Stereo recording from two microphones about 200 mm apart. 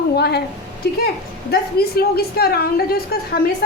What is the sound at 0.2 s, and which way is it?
A woman's voice, 55° left (ahead or behind).